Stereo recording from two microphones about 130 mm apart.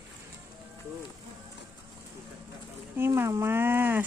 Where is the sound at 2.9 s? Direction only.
20° right (ahead or behind).